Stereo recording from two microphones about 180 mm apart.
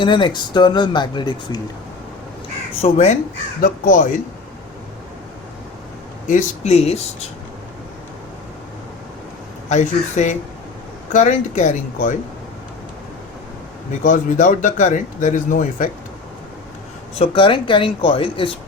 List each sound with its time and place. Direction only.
0.0 s speech: 25° left (ahead or behind)
2.8 s speech: 40° left (ahead or behind)
6.2 s speech: 40° left (ahead or behind)
9.6 s speech: 40° left (ahead or behind)
14.0 s speech: 45° left (ahead or behind)
17.2 s speech: 30° left (ahead or behind)